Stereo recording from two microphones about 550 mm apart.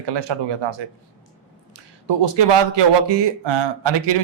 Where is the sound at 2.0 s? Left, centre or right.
Right.